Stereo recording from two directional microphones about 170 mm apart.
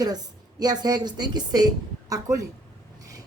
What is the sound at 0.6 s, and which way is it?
A woman's voice, 25° right (ahead or behind).